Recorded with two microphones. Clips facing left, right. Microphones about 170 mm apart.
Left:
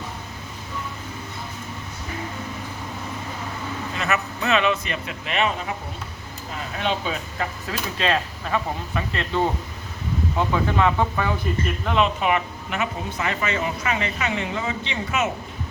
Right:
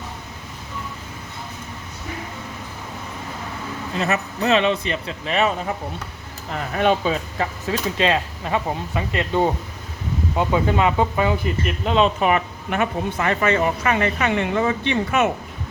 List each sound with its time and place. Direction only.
3.9 s speech: 35° right (ahead or behind)
6.7 s speech: 50° right (ahead or behind)
7.1 s speech: 25° right (ahead or behind)
11.9 s speech: 30° right (ahead or behind)
12.2 s speech: 50° right (ahead or behind)